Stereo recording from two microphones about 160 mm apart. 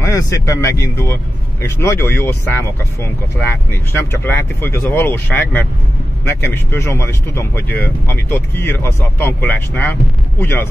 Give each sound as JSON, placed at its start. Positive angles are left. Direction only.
{"t": 0.0, "sound": "speech", "side_deg": 20}